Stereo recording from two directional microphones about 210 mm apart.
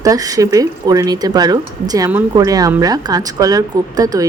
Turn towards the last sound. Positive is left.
turn(degrees=-15)  # may be behind; listen again after turning